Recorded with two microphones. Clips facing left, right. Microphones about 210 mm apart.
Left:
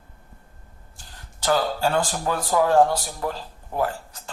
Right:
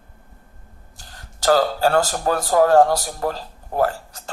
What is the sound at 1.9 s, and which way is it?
Speech, 40° right (ahead or behind).